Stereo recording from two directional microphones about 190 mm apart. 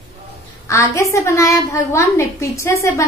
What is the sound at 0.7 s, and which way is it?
A woman's voice, 15° left (ahead or behind).